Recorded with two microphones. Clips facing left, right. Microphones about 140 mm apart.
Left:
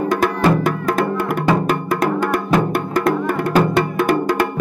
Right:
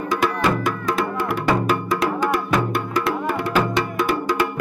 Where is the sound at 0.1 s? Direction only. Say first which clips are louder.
Left 2 dB; 50° left (ahead or behind).